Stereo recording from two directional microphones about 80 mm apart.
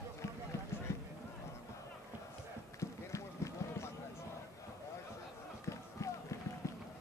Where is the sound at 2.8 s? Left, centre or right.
Left.